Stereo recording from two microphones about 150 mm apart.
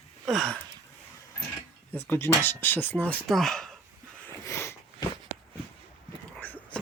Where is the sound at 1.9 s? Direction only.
15° left (ahead or behind).